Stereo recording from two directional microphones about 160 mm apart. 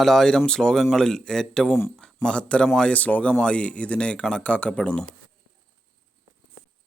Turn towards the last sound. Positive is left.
turn(degrees=5)  # may be behind; listen again after turning